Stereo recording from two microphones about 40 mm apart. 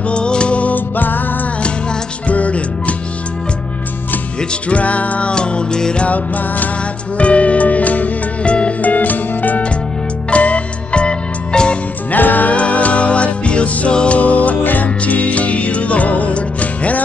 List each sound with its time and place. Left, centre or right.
0.1 s music: left
0.7 s music: left
1.6 s music: left
4.4 s music: left
5.3 s music: left
6.0 s music: left
7.2 s music: left
10.3 s music: left
12.1 s music: left
12.5 s music: left